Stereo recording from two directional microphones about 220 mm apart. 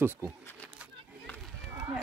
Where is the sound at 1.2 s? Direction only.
5° left (ahead or behind).